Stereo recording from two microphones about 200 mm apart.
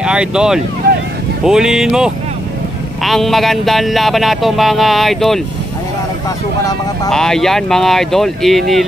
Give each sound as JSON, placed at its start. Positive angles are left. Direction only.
{"t": 0.0, "sound": "speech", "side_deg": -5}
{"t": 7.1, "sound": "speech", "side_deg": 0}